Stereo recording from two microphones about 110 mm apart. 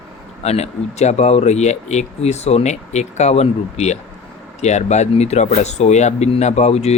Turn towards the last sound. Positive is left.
turn(degrees=75)  # may be behind; listen again after turning